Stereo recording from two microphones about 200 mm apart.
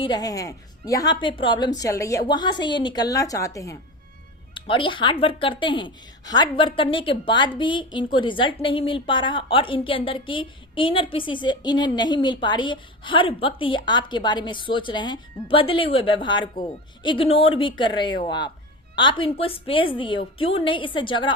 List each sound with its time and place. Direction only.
0.0 s a woman's voice: 20° left (ahead or behind)